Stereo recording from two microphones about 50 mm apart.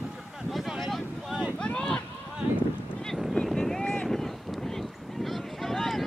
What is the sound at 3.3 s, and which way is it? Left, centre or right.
Boat, centre.